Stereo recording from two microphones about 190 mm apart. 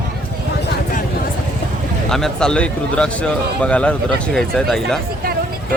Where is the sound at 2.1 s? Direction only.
Centre (ahead or behind).